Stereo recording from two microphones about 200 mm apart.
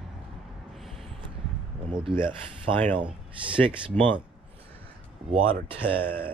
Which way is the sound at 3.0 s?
5° right (ahead or behind).